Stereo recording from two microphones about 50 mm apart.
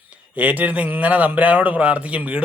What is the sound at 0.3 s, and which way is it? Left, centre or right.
A man's voice, right.